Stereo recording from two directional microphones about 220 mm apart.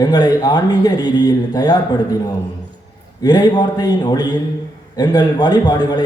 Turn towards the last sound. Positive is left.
turn(degrees=20)  # may be behind; listen again after turning